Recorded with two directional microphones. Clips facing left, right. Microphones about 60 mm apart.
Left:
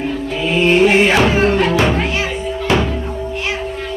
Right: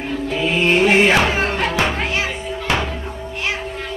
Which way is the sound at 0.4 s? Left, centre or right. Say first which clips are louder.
Left 4 dB; right.